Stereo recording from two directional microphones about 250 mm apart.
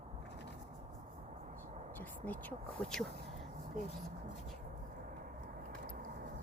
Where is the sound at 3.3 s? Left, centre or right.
Right.